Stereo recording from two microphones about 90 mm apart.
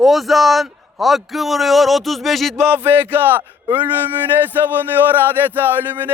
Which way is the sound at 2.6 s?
25° right (ahead or behind).